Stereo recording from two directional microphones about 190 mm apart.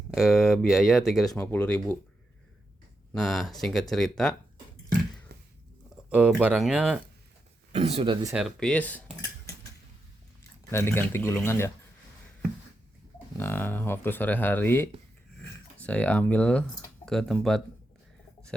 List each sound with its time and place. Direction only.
0.1 s speech: centre (ahead or behind)
3.2 s speech: centre (ahead or behind)
5.3 s a sound: 55° right (ahead or behind)
6.1 s speech: 5° right (ahead or behind)
7.7 s speech: 35° right (ahead or behind)
8.3 s speech: centre (ahead or behind)
10.7 s speech: 15° left (ahead or behind)
13.3 s speech: 10° left (ahead or behind)